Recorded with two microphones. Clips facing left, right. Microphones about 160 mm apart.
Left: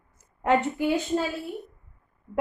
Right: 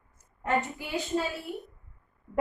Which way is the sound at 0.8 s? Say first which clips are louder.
Left 15 dB; 55° left (ahead or behind).